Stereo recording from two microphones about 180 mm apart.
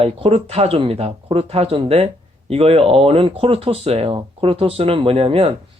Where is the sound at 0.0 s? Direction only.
35° right (ahead or behind).